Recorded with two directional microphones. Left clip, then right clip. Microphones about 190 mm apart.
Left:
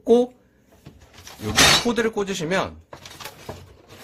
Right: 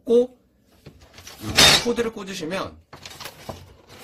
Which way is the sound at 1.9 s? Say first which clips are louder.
Left 4 dB; 35° left (ahead or behind).